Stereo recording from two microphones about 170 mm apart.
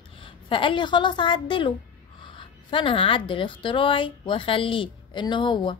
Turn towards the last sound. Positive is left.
turn(degrees=30)  # may be behind; listen again after turning